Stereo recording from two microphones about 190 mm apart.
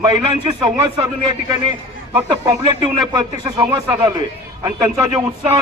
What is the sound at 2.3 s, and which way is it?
Speech, 20° right (ahead or behind).